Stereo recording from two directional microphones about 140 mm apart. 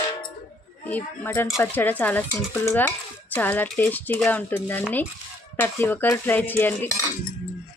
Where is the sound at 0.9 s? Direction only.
15° left (ahead or behind).